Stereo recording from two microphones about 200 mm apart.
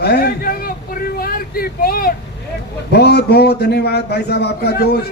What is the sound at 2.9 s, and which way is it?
A man's voice, 55° left (ahead or behind).